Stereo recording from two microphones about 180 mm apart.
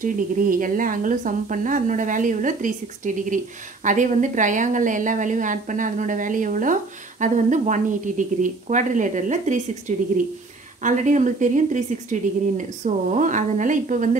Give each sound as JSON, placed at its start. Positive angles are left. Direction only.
{"t": 0.0, "sound": "a woman's voice", "side_deg": -45}